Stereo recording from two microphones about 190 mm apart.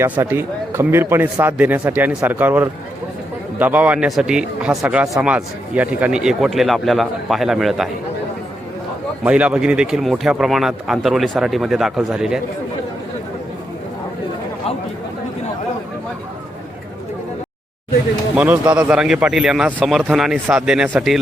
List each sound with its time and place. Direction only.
0.0 s a man's voice: 10° right (ahead or behind)
9.2 s a man's voice: 5° right (ahead or behind)
18.3 s a man's voice: 10° right (ahead or behind)